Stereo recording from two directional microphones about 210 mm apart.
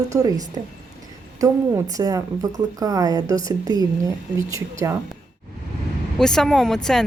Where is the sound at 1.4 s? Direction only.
15° right (ahead or behind).